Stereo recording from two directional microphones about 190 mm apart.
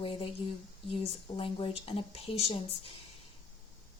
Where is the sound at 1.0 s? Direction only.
30° left (ahead or behind).